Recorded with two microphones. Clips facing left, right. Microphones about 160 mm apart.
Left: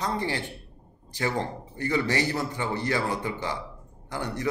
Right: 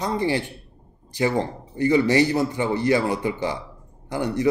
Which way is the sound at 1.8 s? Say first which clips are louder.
Right 8 dB; 15° right (ahead or behind).